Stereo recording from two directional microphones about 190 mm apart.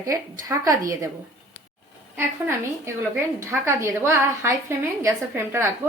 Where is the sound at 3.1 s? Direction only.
15° right (ahead or behind).